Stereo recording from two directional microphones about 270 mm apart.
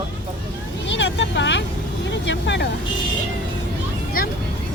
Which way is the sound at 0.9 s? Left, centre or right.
Left.